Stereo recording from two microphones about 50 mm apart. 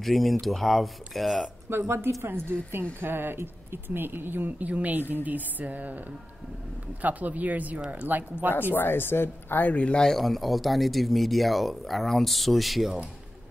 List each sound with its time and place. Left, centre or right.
0.0 s speech: centre
1.7 s a woman's voice: right
2.2 s a woman's voice: right
7.0 s speech: right
8.7 s a woman's voice: left
9.6 s a man's voice: left
10.0 s speech: centre